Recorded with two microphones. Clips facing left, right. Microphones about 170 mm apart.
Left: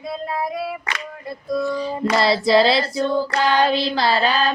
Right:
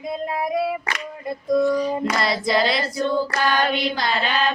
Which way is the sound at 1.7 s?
30° left (ahead or behind).